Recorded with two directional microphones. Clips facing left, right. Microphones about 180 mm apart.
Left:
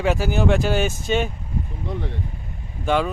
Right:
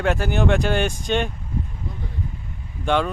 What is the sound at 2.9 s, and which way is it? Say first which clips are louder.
Speech: even; 5° left (ahead or behind).